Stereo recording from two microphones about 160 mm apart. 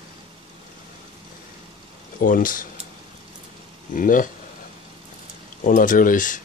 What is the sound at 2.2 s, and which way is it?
Speech, 60° left (ahead or behind).